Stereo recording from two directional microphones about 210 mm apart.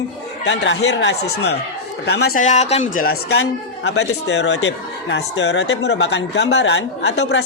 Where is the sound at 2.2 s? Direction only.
40° left (ahead or behind).